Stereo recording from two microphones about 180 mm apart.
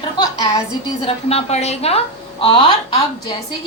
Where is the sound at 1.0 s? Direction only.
35° left (ahead or behind).